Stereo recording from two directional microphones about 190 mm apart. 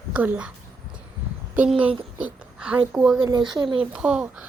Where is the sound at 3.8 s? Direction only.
5° right (ahead or behind).